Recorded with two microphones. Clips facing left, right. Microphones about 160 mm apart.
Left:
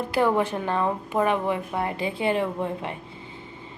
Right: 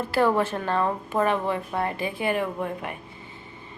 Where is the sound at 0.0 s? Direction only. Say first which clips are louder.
Even; 15° left (ahead or behind).